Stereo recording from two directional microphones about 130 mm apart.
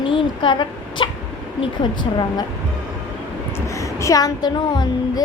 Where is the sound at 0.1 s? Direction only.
40° left (ahead or behind).